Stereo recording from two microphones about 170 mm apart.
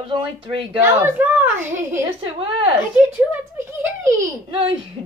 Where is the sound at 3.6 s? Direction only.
15° right (ahead or behind).